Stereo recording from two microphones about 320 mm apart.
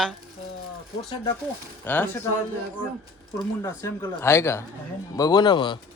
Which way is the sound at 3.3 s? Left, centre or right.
Centre.